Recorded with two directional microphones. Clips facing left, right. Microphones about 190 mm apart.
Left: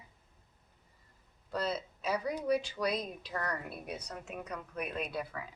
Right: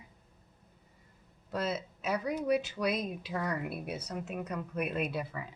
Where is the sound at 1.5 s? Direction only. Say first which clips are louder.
Right 1 dB; 5° right (ahead or behind).